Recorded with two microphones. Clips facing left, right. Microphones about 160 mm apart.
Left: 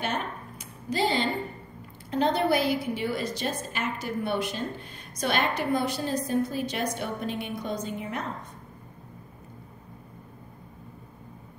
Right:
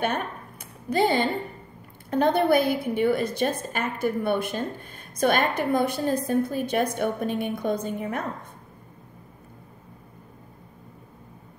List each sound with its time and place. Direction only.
0.0 s a woman's voice: 55° right (ahead or behind)